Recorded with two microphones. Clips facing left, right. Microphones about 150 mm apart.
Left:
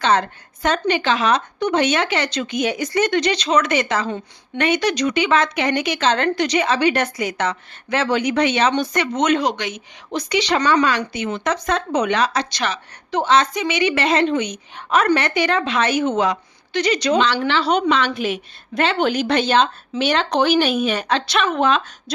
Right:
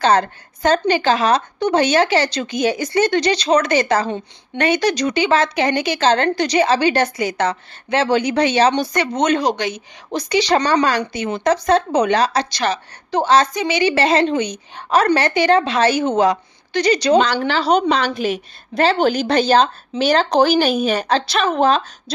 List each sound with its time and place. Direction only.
0.0 s speech: 35° right (ahead or behind)